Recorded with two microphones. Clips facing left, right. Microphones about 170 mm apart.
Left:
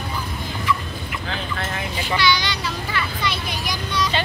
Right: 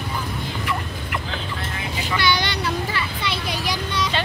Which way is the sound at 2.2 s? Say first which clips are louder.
Right 1 dB; 55° right (ahead or behind).